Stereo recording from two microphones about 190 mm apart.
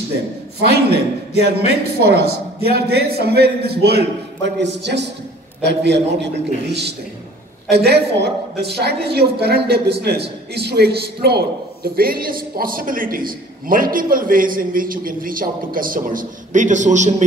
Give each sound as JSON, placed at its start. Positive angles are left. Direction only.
{"t": 1.3, "sound": "a man's voice", "side_deg": 35}
{"t": 2.0, "sound": "a man's voice", "side_deg": -55}